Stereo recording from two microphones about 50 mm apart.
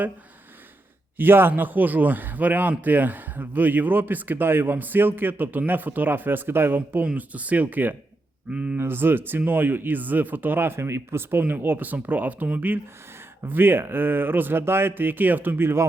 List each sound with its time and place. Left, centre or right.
1.1 s a man's voice: right
7.2 s a man's voice: right
8.4 s speech: right
8.8 s speech: right
11.6 s a man's voice: right